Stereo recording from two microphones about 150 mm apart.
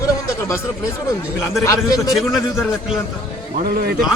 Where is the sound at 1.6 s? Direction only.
20° left (ahead or behind).